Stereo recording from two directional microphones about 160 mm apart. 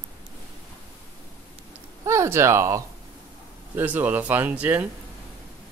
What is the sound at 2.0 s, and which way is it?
Speech, 20° right (ahead or behind).